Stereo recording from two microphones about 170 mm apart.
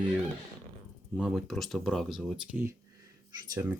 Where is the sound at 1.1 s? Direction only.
Centre (ahead or behind).